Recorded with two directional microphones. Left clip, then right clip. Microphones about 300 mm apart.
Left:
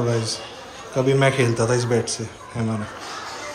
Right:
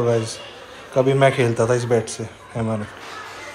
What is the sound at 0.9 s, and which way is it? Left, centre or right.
A man's voice, centre.